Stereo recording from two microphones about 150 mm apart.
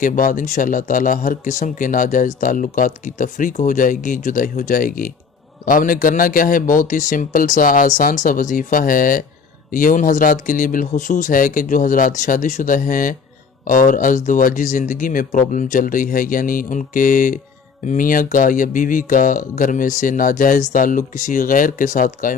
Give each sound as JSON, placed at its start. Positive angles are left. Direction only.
{"t": 0.0, "sound": "speech", "side_deg": 65}